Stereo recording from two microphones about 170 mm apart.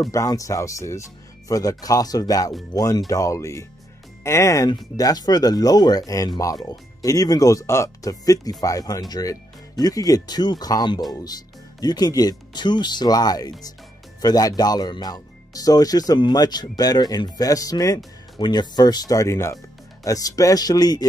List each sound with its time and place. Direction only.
0.1 s speech: 20° left (ahead or behind)